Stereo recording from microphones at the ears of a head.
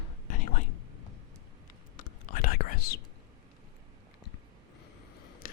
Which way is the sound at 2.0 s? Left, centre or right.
Left.